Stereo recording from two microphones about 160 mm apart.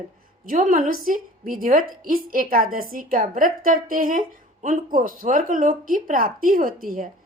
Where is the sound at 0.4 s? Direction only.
55° right (ahead or behind).